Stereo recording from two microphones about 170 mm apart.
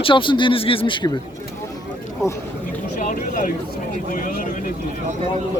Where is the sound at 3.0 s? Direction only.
55° left (ahead or behind).